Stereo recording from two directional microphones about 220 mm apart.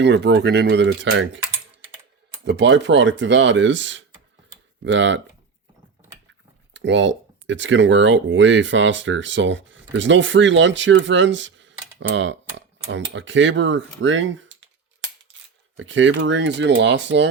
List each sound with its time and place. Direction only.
0.0 s speech: 50° right (ahead or behind)
2.4 s speech: 55° right (ahead or behind)
6.7 s speech: 55° right (ahead or behind)